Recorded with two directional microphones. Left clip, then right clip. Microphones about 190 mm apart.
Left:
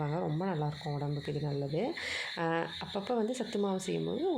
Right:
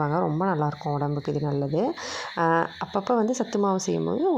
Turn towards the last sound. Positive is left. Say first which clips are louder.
# right 9 dB
turn(degrees=-25)  # may be behind; listen again after turning